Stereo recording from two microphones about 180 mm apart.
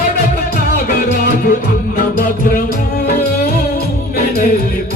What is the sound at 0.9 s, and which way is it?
Music, 60° left (ahead or behind).